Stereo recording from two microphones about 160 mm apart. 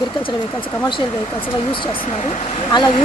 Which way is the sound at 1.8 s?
45° left (ahead or behind).